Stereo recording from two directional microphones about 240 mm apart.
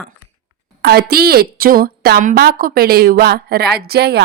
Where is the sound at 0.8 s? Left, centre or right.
Right.